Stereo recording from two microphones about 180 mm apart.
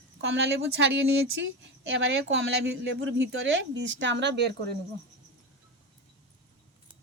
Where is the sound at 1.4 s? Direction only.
85° right.